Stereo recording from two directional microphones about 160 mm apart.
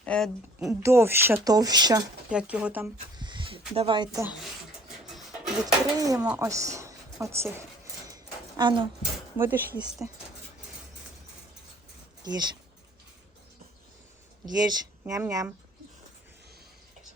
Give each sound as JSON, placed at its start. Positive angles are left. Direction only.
{"t": 0.0, "sound": "speech", "side_deg": 5}
{"t": 0.6, "sound": "speech", "side_deg": -20}
{"t": 2.3, "sound": "speech", "side_deg": -5}
{"t": 3.2, "sound": "a sound", "side_deg": -30}
{"t": 3.8, "sound": "speech", "side_deg": -30}
{"t": 5.6, "sound": "speech", "side_deg": -20}
{"t": 6.1, "sound": "speech", "side_deg": -5}
{"t": 6.4, "sound": "speech", "side_deg": -20}
{"t": 8.0, "sound": "a sound", "side_deg": -25}
{"t": 9.4, "sound": "speech", "side_deg": -10}
{"t": 12.2, "sound": "speech", "side_deg": -25}
{"t": 14.4, "sound": "speech", "side_deg": -25}